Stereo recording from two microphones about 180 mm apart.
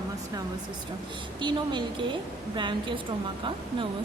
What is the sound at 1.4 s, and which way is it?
A woman's voice, 25° right (ahead or behind).